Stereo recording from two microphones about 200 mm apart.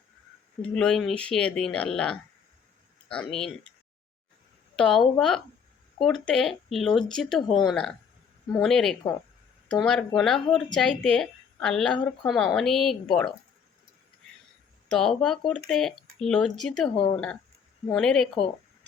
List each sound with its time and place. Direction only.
0.8 s a woman's voice: centre (ahead or behind)
4.8 s a woman's voice: centre (ahead or behind)
7.4 s speech: 20° left (ahead or behind)
7.7 s a woman's voice: 5° left (ahead or behind)
14.8 s a woman's voice: centre (ahead or behind)
17.9 s a woman's voice: 5° left (ahead or behind)